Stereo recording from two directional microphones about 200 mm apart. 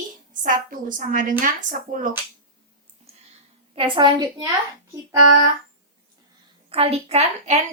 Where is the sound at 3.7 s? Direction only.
25° right (ahead or behind).